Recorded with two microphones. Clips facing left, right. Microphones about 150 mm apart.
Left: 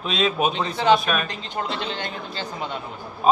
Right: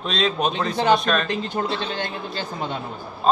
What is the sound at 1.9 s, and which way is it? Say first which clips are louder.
Speech: right 2 dB; 50° right (ahead or behind).